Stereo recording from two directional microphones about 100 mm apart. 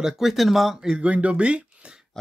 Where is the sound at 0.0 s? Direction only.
5° right (ahead or behind).